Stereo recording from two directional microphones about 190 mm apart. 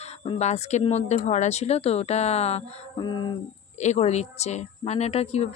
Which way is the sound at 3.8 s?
35° left (ahead or behind).